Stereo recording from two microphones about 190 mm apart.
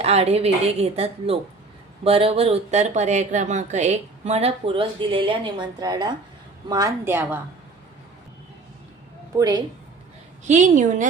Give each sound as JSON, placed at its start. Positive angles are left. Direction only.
{"t": 0.0, "sound": "a woman's voice", "side_deg": -35}
{"t": 9.4, "sound": "a woman's voice", "side_deg": -20}
{"t": 10.4, "sound": "speech", "side_deg": -40}